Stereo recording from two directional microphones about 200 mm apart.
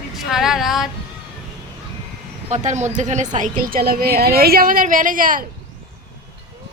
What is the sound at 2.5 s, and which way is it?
A woman's voice, 35° right (ahead or behind).